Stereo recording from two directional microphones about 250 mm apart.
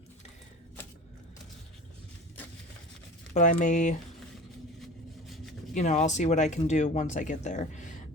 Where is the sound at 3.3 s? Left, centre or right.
Left.